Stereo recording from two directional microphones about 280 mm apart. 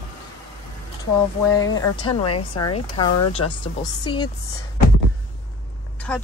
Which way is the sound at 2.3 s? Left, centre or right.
Left.